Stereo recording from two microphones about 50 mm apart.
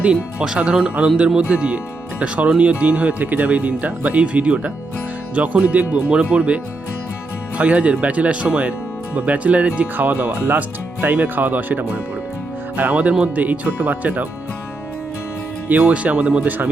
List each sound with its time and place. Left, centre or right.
0.0 s speech: right
7.6 s speech: right
15.9 s speech: right
16.4 s speech: right